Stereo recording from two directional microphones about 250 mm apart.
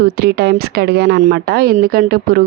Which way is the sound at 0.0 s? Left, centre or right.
Right.